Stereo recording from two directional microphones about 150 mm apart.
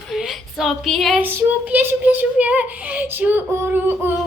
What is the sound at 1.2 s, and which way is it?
Speech, 10° right (ahead or behind).